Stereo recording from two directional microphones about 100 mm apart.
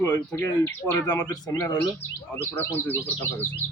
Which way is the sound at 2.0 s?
20° left (ahead or behind).